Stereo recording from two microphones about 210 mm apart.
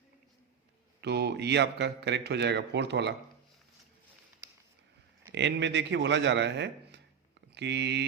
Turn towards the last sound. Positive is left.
turn(degrees=-55)  # may be behind; listen again after turning